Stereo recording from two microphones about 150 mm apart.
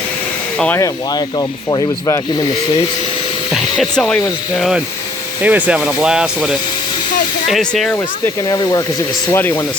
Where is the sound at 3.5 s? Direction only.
Centre (ahead or behind).